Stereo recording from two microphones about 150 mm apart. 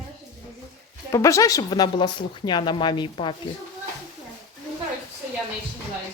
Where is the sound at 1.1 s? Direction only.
20° left (ahead or behind).